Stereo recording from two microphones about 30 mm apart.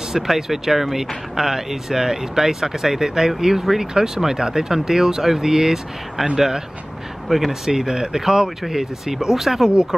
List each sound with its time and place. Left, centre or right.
0.1 s speech: centre
7.2 s speech: centre
7.7 s speech: right